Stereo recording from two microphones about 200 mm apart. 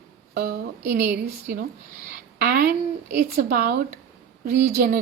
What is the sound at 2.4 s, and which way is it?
A woman's voice, 50° right (ahead or behind).